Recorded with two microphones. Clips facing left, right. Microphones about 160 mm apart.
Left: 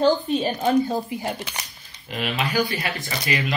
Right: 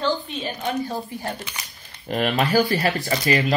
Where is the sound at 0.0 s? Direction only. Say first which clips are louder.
Left 6 dB; 40° left (ahead or behind).